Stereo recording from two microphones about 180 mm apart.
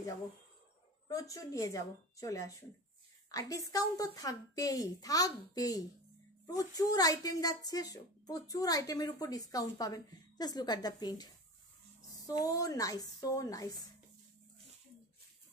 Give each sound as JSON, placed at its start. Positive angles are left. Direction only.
{"t": 1.0, "sound": "a woman's voice", "side_deg": 20}
{"t": 12.3, "sound": "a woman's voice", "side_deg": 20}